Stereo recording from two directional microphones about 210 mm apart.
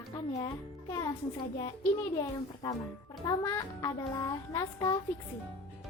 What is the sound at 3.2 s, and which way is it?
A child's voice, 15° left (ahead or behind).